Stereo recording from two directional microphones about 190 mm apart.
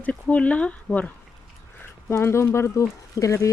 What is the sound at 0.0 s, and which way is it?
Speech, 5° left (ahead or behind).